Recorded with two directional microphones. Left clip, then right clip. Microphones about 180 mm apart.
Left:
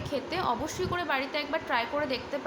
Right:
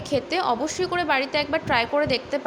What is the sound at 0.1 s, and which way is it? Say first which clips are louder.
A woman's voice: right 7 dB; 35° right (ahead or behind).